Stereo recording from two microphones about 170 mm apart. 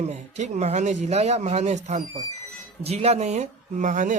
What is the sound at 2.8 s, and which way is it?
Speech, 40° right (ahead or behind).